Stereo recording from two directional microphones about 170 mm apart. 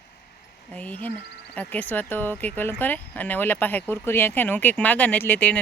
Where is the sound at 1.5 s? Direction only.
10° left (ahead or behind).